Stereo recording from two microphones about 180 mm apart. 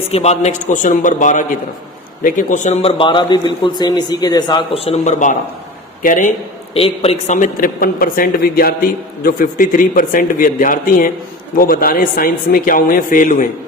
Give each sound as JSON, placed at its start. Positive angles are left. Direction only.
{"t": 0.1, "sound": "speech", "side_deg": 35}
{"t": 3.0, "sound": "speech", "side_deg": 25}
{"t": 6.7, "sound": "speech", "side_deg": 35}